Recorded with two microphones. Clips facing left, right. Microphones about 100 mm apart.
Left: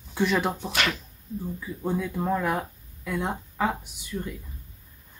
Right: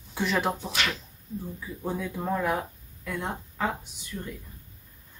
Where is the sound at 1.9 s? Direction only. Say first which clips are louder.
Left 3 dB; centre (ahead or behind).